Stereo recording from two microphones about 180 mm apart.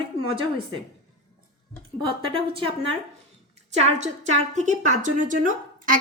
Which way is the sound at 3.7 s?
40° right (ahead or behind).